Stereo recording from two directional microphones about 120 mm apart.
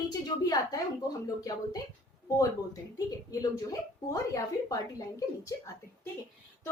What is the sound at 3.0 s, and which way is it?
A woman's voice, 30° left (ahead or behind).